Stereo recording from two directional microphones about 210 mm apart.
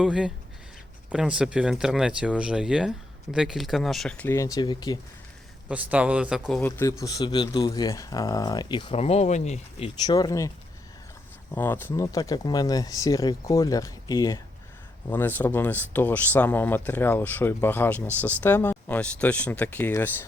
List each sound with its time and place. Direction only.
0.0 s speech: 5° right (ahead or behind); by 4.9 s 20° left (ahead or behind)
5.6 s speech: 5° right (ahead or behind)
6.6 s speech: 10° left (ahead or behind); by 9.9 s 30° left (ahead or behind)
10.1 s speech: 20° left (ahead or behind)
11.5 s speech: 10° left (ahead or behind)